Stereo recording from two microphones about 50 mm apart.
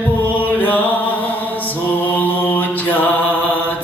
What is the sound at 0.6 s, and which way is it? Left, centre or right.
Music, left.